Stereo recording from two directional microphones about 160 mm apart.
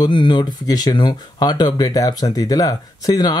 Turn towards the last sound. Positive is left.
turn(degrees=25)  # may be behind; listen again after turning